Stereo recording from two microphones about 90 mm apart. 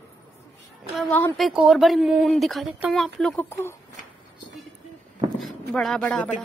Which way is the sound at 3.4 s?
30° left (ahead or behind).